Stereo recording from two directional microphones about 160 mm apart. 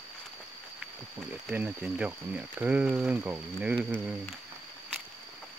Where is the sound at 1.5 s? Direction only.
10° right (ahead or behind).